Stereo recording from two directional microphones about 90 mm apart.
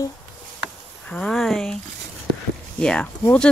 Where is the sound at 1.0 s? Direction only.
10° left (ahead or behind).